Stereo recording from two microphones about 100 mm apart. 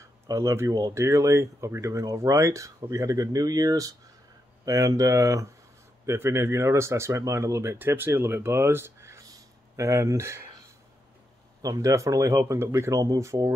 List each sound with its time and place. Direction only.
0.3 s speech: 30° right (ahead or behind)
11.6 s speech: 35° right (ahead or behind)